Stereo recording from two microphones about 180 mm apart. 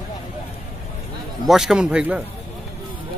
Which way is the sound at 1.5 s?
5° right (ahead or behind).